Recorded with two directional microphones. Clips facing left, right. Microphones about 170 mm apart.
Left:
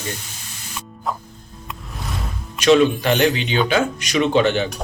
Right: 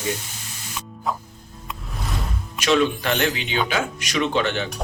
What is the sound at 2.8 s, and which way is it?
Speech, 5° left (ahead or behind).